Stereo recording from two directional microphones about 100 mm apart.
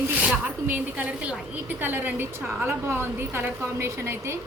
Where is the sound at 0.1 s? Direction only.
10° right (ahead or behind).